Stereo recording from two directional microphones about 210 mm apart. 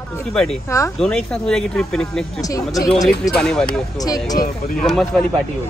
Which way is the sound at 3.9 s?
15° left (ahead or behind).